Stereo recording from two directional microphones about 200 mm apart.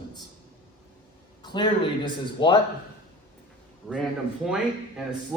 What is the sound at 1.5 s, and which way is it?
A man's voice, 20° left (ahead or behind).